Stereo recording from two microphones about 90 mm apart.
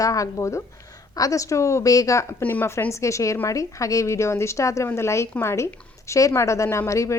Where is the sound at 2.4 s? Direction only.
20° left (ahead or behind).